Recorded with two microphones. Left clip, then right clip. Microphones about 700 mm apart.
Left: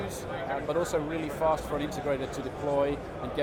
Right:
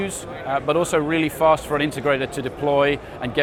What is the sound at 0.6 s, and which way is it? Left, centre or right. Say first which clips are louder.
Speech: right 10 dB; right.